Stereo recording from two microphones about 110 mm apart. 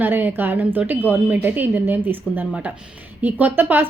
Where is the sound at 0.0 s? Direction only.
15° right (ahead or behind).